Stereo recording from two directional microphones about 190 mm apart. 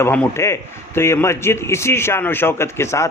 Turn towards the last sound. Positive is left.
turn(degrees=15)  # may be behind; listen again after turning